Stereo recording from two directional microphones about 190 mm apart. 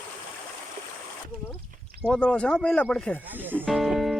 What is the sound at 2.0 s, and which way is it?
Speech, 5° left (ahead or behind).